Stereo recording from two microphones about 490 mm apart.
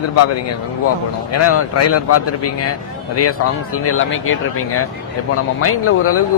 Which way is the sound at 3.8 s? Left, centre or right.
Left.